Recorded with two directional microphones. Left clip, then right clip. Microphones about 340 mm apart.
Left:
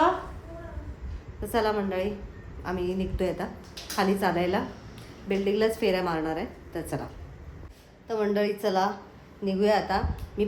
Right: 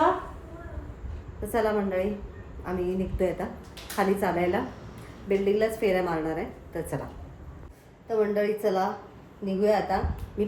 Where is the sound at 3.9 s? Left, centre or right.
Centre.